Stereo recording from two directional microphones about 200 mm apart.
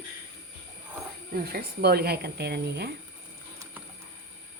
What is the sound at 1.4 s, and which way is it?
A woman's voice, 50° right (ahead or behind).